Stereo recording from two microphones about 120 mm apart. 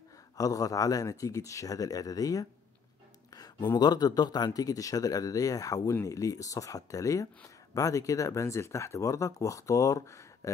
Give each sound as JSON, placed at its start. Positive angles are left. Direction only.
{"t": 0.4, "sound": "speech", "side_deg": 30}